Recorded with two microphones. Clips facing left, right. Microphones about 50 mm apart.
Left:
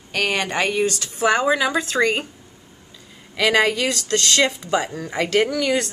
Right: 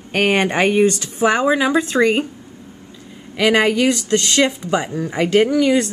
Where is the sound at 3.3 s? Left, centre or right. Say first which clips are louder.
Right 3 dB; centre.